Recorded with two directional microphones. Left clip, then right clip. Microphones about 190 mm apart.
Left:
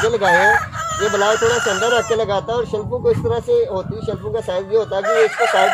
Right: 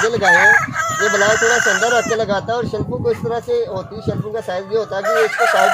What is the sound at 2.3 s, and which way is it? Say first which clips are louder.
Speech: even; 15° right (ahead or behind).